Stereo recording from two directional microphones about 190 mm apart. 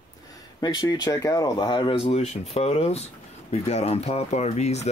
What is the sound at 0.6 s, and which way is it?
Speech, 20° left (ahead or behind).